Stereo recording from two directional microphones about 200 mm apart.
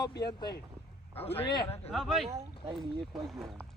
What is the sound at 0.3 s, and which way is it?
Speech, 20° left (ahead or behind).